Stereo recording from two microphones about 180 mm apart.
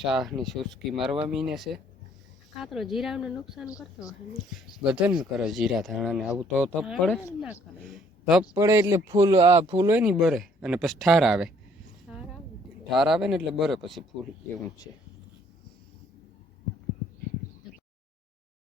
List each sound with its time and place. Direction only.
0.0 s speech: centre (ahead or behind)
8.5 s speech: 15° right (ahead or behind)
12.9 s speech: centre (ahead or behind)